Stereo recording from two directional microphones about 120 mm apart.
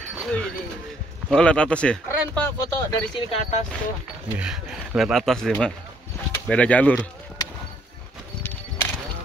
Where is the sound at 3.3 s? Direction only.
75° left (ahead or behind).